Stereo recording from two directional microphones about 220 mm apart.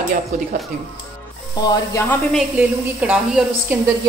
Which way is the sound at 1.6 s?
15° left (ahead or behind).